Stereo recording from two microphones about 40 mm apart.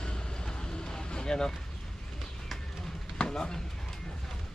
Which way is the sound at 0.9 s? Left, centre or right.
Centre.